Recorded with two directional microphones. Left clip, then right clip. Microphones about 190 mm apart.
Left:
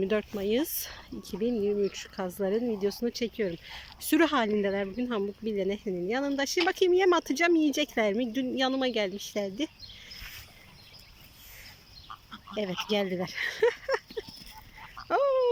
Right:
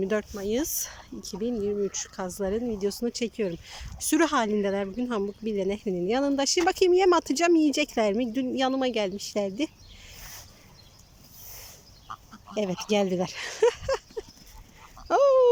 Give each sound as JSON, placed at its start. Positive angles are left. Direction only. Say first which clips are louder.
{"t": 0.0, "sound": "speech", "louder": "right 1 dB", "side_deg": 0}
{"t": 12.3, "sound": "speech", "louder": "right 3 dB", "side_deg": -10}
{"t": 15.0, "sound": "dog", "louder": "right 6 dB", "side_deg": -10}